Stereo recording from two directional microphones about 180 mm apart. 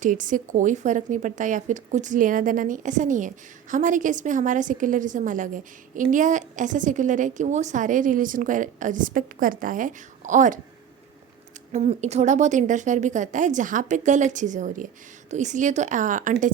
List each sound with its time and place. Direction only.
0.0 s a woman's voice: 45° right (ahead or behind)
11.7 s a woman's voice: 35° right (ahead or behind)